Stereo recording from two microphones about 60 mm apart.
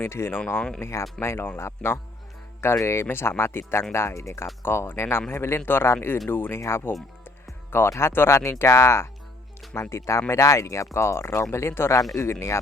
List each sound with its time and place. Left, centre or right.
0.0 s speech: left
0.3 s speech: left
0.8 s speech: left
4.6 s speech: left
6.6 s speech: left
7.9 s speech: left